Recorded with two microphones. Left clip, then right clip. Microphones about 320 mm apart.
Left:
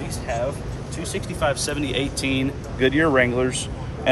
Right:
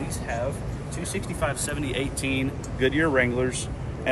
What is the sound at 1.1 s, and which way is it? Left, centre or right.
Speech, centre.